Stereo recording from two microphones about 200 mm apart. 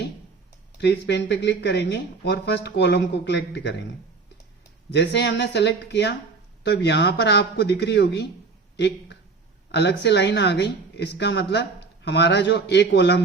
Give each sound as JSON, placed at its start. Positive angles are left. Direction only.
{"t": 0.8, "sound": "speech", "side_deg": 60}
{"t": 4.9, "sound": "speech", "side_deg": 60}